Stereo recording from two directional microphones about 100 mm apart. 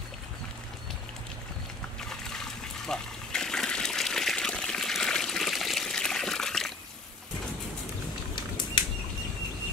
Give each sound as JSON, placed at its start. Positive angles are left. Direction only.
{"t": 2.9, "sound": "water", "side_deg": 5}
{"t": 8.4, "sound": "bird flight", "side_deg": 50}